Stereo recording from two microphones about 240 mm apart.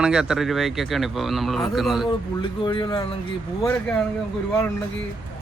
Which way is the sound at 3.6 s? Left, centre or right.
Centre.